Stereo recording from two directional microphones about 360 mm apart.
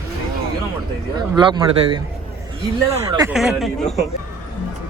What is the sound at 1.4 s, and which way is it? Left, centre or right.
Speech, centre.